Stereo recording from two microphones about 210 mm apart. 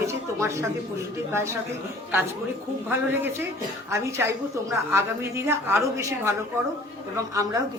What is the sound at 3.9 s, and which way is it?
A man's voice, 10° right (ahead or behind).